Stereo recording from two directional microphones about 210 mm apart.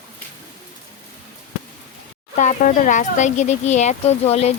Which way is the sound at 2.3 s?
35° left (ahead or behind).